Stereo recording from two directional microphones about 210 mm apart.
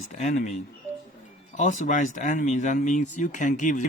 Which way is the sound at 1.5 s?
35° left (ahead or behind).